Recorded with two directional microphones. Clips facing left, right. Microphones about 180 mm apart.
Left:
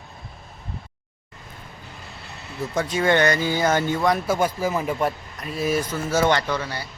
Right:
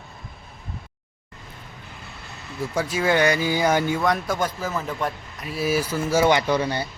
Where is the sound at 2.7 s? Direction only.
5° right (ahead or behind).